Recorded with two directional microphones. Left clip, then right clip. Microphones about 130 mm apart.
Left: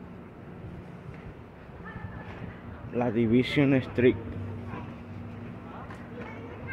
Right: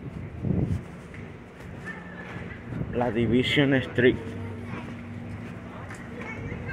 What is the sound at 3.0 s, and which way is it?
A man's voice, 45° left (ahead or behind).